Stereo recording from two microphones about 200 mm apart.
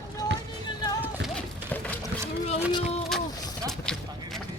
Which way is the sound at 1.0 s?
Centre (ahead or behind).